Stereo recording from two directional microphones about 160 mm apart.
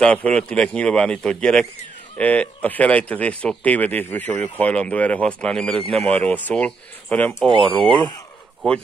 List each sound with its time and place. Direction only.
0.0 s speech: 5° left (ahead or behind)
7.4 s speech: 30° right (ahead or behind)